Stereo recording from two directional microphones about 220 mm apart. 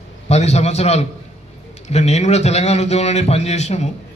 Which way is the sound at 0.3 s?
30° left (ahead or behind).